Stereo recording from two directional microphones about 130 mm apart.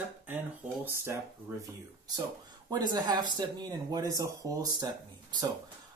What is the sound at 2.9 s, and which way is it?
Speech, 30° right (ahead or behind).